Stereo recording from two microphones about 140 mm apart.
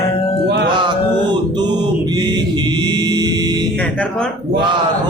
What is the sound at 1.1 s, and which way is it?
Mantra, 30° right (ahead or behind).